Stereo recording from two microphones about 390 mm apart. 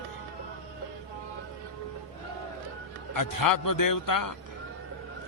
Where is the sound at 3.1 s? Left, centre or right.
Left.